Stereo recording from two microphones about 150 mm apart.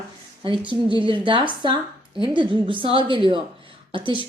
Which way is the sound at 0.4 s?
35° right (ahead or behind).